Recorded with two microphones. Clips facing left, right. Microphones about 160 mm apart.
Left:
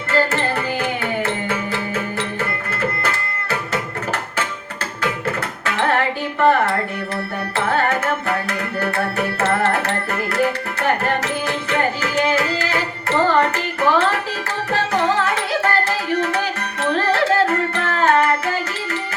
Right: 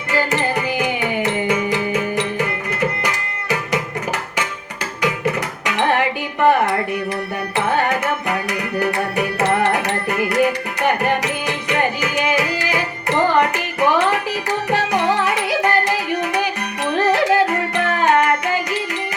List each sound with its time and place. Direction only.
0.1 s music: 15° right (ahead or behind)
5.2 s music: 15° right (ahead or behind)